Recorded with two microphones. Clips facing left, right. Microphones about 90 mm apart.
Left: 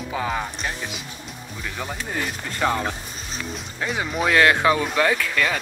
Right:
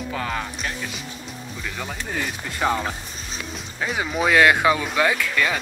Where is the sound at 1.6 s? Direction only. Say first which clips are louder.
Left 1 dB; 5° left (ahead or behind).